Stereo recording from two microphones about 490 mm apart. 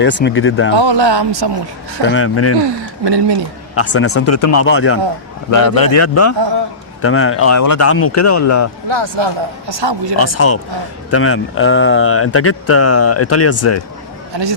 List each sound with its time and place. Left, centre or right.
0.0 s speech: left
0.8 s speech: right
2.0 s speech: left
3.0 s speech: right
3.8 s speech: left
5.5 s speech: left
6.0 s speech: left
8.9 s speech: right
10.2 s speech: left